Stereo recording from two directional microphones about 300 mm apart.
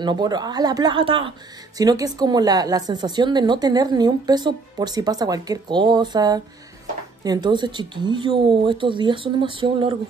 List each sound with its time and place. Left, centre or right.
0.0 s speech: centre